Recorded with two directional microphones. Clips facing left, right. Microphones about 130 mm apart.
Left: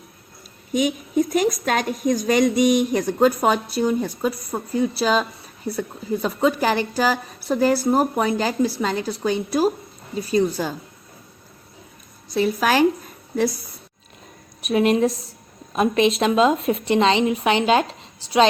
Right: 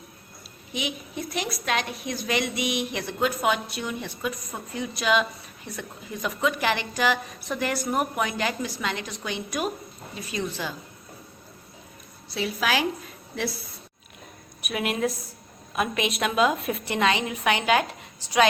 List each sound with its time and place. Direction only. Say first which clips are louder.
0.7 s a woman's voice: left 11 dB; 45° left (ahead or behind)
12.3 s a woman's voice: left 7 dB; 45° left (ahead or behind)
14.6 s a woman's voice: left 9 dB; 35° left (ahead or behind)